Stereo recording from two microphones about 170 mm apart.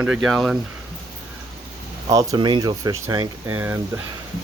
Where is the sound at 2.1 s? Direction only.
20° right (ahead or behind).